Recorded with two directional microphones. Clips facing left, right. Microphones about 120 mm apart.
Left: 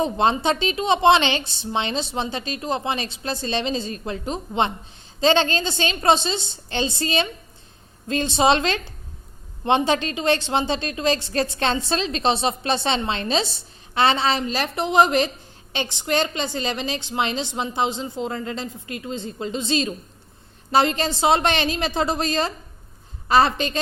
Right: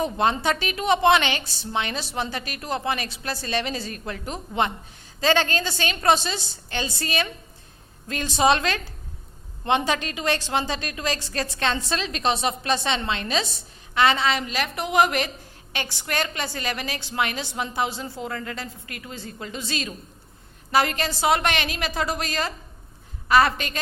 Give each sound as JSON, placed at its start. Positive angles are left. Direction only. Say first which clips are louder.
{"t": 0.0, "sound": "a woman's voice", "louder": "left 3 dB", "side_deg": 25}